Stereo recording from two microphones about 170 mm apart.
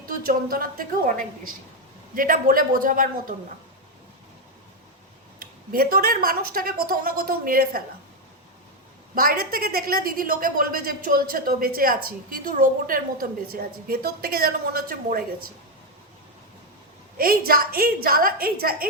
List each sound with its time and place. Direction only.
0.0 s a woman's voice: 60° right (ahead or behind)
5.4 s a woman's voice: 60° right (ahead or behind)
9.1 s a woman's voice: 60° right (ahead or behind)
17.2 s a woman's voice: 60° right (ahead or behind)